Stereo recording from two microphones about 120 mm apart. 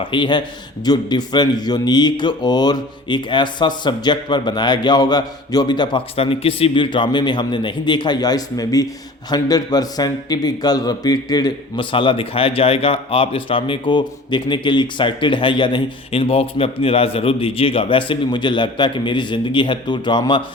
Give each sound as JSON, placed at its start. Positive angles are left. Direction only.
{"t": 0.0, "sound": "a man's voice", "side_deg": 45}
{"t": 6.1, "sound": "a man's voice", "side_deg": 50}